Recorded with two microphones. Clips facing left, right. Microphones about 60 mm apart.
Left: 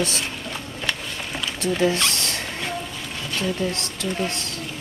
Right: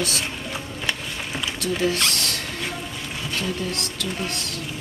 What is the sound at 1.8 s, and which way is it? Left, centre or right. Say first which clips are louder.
Rodents: left 2 dB; left.